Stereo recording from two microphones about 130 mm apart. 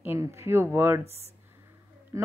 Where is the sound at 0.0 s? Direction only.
20° right (ahead or behind).